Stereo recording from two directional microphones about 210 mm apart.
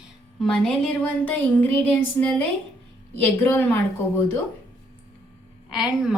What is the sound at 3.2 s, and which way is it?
Speech, 10° left (ahead or behind).